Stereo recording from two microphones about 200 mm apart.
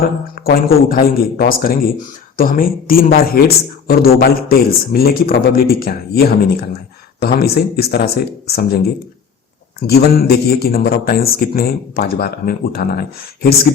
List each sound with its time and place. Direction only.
0.3 s a man's voice: 50° left (ahead or behind)